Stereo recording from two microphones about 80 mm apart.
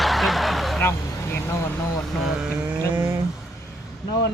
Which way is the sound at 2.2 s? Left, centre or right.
Centre.